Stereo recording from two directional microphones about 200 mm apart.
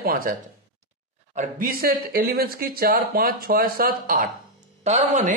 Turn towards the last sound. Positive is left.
turn(degrees=-35)  # may be behind; listen again after turning